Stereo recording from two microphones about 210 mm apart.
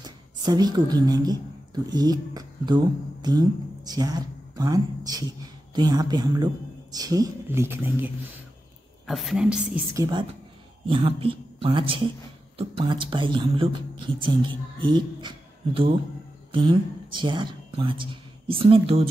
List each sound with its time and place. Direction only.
0.0 s a woman's voice: 20° right (ahead or behind); by 9.8 s 5° right (ahead or behind)
9.9 s speech: 20° right (ahead or behind)